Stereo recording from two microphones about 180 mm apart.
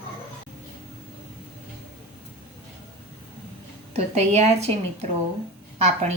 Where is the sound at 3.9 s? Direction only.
35° right (ahead or behind).